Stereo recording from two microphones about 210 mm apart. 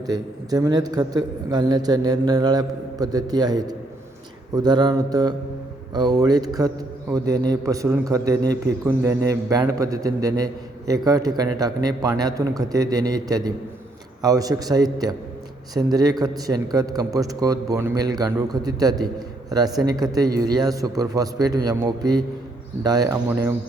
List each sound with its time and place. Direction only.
0.1 s a man's voice: 20° right (ahead or behind)